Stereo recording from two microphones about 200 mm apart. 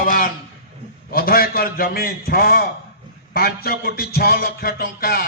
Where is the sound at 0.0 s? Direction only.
45° left (ahead or behind).